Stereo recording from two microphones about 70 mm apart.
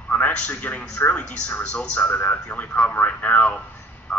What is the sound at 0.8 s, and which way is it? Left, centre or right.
A man's voice, centre.